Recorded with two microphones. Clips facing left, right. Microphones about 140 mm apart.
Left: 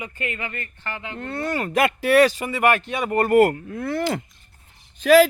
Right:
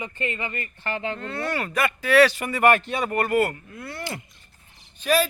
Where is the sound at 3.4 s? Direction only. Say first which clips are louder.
Left 7 dB; 80° left.